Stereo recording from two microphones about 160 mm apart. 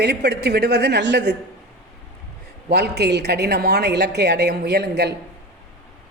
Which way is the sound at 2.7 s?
90° right.